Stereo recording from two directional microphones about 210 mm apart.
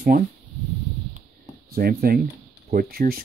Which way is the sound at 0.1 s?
40° right (ahead or behind).